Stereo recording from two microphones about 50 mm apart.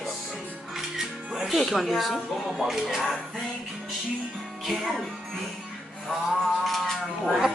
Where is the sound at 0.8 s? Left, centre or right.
Centre.